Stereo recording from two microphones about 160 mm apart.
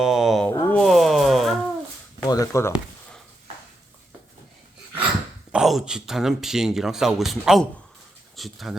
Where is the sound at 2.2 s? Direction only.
20° left (ahead or behind).